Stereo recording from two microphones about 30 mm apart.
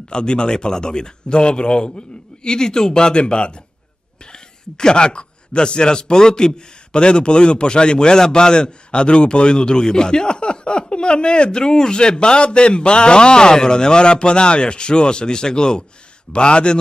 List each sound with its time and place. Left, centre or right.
0.1 s a man's voice: left